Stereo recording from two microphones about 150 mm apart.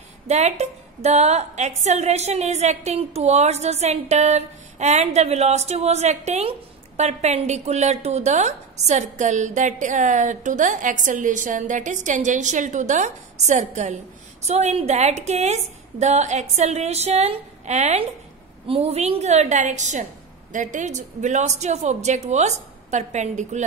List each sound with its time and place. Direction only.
0.3 s a woman's voice: 50° right (ahead or behind)